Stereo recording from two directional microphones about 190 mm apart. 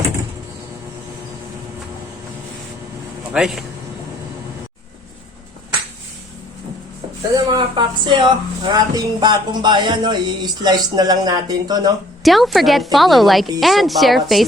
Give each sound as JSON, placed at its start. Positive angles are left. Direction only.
{"t": 3.3, "sound": "a woman's voice", "side_deg": 0}
{"t": 7.3, "sound": "speech", "side_deg": -20}
{"t": 12.2, "sound": "a woman's voice", "side_deg": 0}